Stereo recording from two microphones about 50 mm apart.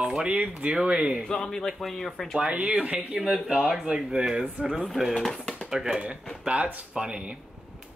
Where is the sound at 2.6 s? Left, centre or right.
Centre.